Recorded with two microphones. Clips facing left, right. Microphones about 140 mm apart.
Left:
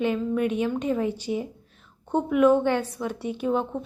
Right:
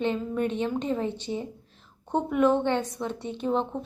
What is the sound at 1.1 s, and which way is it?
A woman's voice, 10° left (ahead or behind).